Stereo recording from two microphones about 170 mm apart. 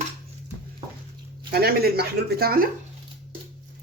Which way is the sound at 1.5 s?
65° right (ahead or behind).